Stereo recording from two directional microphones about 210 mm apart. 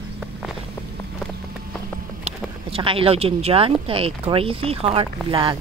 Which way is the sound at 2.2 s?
25° right (ahead or behind).